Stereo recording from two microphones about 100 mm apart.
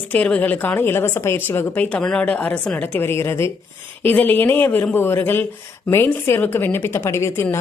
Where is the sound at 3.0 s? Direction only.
25° left (ahead or behind).